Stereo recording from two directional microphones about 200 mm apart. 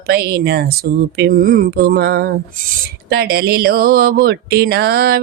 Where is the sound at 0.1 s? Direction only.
50° right (ahead or behind).